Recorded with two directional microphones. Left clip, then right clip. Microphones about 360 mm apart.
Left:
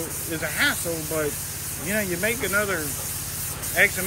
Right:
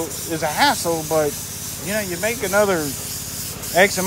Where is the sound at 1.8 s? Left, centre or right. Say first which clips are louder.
Right 2 dB; centre.